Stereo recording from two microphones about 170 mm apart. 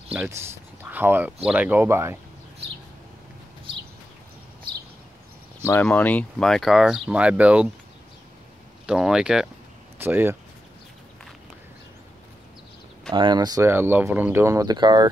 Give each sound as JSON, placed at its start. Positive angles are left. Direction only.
{"t": 0.1, "sound": "speech", "side_deg": -10}
{"t": 5.7, "sound": "speech", "side_deg": 10}
{"t": 8.8, "sound": "speech", "side_deg": -5}
{"t": 13.1, "sound": "speech", "side_deg": -25}